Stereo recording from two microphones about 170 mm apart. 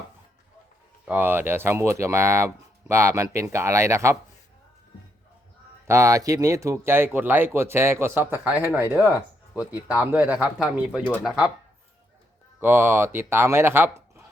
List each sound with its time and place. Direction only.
1.0 s speech: 10° right (ahead or behind)
5.9 s speech: 15° right (ahead or behind)
9.0 s speech: 20° left (ahead or behind)
9.9 s speech: 10° right (ahead or behind)
11.0 s speech: 5° left (ahead or behind)
12.5 s speech: 15° right (ahead or behind)